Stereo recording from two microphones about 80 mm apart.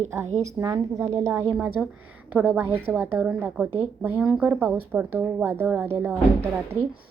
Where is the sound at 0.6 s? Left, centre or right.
Right.